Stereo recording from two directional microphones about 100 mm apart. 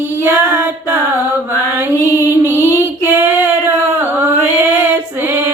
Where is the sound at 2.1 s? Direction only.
25° right (ahead or behind).